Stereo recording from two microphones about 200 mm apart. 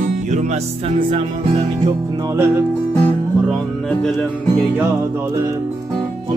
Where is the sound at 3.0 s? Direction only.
5° left (ahead or behind).